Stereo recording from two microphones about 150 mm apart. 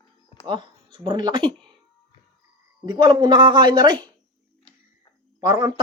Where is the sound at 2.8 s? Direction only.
30° right (ahead or behind).